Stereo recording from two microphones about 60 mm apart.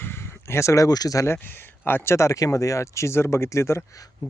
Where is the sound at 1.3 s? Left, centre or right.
Left.